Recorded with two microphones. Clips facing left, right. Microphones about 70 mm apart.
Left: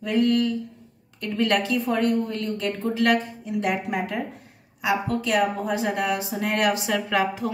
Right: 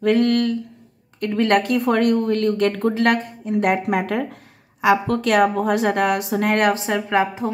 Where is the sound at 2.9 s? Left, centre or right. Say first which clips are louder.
Right 2 dB; right.